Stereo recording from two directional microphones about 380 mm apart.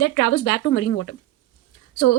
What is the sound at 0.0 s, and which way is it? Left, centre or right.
A woman's voice, left.